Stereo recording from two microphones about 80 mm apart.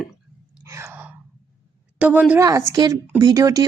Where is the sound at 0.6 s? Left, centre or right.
Right.